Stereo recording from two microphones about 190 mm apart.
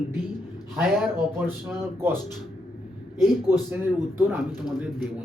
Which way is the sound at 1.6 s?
15° right (ahead or behind).